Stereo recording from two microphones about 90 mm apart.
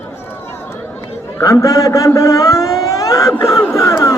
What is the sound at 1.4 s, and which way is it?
Speech, 40° left (ahead or behind).